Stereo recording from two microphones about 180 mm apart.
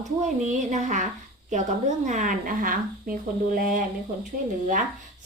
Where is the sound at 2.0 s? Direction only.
45° right (ahead or behind).